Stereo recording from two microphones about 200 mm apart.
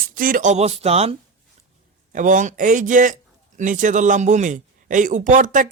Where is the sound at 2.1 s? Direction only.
40° right (ahead or behind).